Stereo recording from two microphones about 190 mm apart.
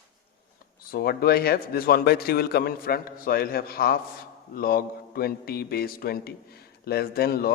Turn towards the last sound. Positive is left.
turn(degrees=50)  # may be behind; listen again after turning